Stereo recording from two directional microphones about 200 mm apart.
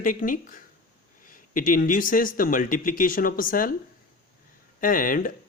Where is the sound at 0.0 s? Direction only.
40° left (ahead or behind).